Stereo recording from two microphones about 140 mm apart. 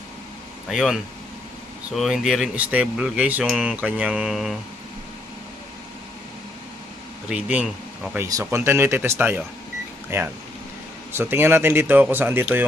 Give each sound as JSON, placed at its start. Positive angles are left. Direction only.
{"t": 0.7, "sound": "speech", "side_deg": -5}
{"t": 2.0, "sound": "speech", "side_deg": -5}
{"t": 7.3, "sound": "speech", "side_deg": -10}
{"t": 8.2, "sound": "speech", "side_deg": -20}